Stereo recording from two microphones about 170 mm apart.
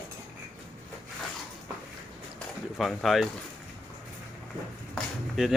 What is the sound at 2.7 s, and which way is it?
Speech, centre (ahead or behind).